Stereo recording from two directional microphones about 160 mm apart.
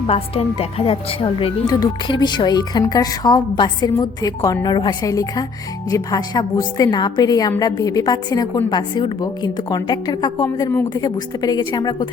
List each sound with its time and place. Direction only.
0.1 s a woman's voice: 35° left (ahead or behind)
1.6 s speech: 25° left (ahead or behind)